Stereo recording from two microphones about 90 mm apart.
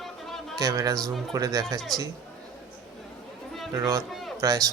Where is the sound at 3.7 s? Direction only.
40° right (ahead or behind).